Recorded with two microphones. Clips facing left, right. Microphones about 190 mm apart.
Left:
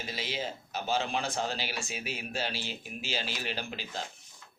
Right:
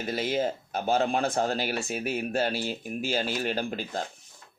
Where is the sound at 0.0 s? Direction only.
55° right (ahead or behind).